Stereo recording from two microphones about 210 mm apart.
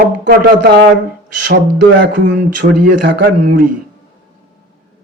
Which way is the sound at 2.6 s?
45° right (ahead or behind).